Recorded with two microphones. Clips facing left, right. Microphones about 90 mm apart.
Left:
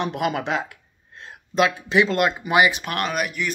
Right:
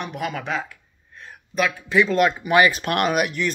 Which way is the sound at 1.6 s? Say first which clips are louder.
Left 1 dB; 25° left (ahead or behind).